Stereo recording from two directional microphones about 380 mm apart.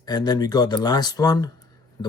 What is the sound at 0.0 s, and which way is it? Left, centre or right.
Speech, centre.